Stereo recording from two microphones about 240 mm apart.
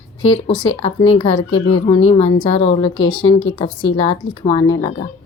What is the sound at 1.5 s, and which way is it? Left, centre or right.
Speech, left.